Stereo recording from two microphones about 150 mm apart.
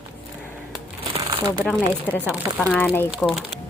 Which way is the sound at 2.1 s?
10° left (ahead or behind).